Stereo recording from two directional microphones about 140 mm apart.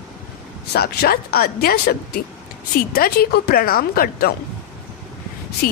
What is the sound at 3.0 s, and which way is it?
Speech, 90° left.